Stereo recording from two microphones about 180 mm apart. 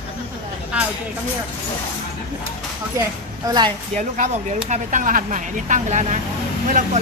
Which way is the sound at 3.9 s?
40° right (ahead or behind).